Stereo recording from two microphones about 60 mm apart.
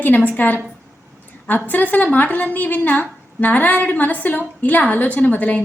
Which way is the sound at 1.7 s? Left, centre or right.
Left.